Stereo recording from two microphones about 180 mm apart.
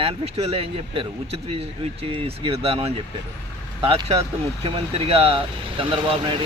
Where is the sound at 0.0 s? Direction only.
35° right (ahead or behind).